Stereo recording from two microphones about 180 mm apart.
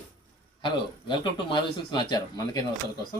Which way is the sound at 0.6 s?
25° left (ahead or behind).